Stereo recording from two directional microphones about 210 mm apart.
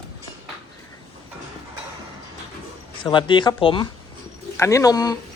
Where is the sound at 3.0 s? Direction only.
20° left (ahead or behind).